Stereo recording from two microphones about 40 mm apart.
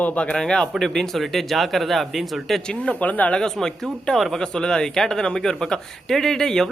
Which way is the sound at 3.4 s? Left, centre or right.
Centre.